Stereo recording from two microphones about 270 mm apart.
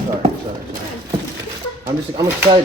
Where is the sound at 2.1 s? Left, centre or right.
Centre.